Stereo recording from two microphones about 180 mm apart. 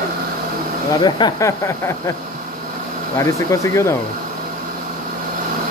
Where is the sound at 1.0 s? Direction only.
20° left (ahead or behind).